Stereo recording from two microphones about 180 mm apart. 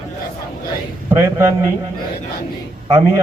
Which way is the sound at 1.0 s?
15° right (ahead or behind).